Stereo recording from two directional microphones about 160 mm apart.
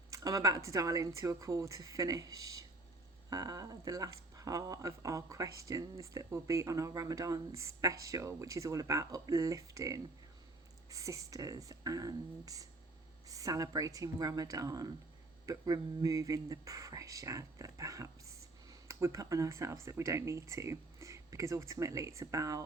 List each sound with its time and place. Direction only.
0.1 s speech: 20° right (ahead or behind)